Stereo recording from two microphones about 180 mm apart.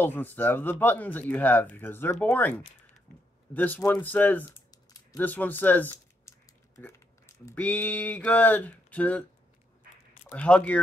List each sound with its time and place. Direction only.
0.0 s speech: 10° left (ahead or behind)
4.5 s computer keyboard: 20° left (ahead or behind)
5.2 s speech: 10° left (ahead or behind)
10.3 s speech: 5° left (ahead or behind)